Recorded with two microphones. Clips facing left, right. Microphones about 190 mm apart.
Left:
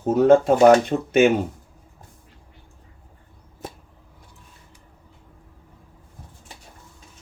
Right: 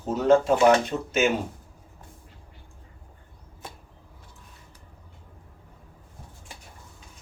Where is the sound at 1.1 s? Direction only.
55° left (ahead or behind).